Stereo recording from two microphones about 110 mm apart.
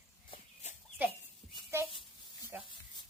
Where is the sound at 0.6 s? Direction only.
90° left.